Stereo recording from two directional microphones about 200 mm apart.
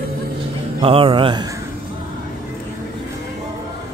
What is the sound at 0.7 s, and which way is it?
Speech, 25° right (ahead or behind).